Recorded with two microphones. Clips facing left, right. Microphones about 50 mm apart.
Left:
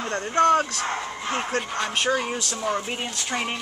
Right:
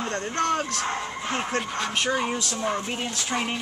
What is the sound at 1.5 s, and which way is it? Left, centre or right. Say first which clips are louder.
Speech: left 1 dB; centre.